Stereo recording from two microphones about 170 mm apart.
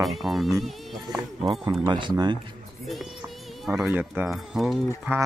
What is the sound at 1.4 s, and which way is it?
Speech, 30° right (ahead or behind).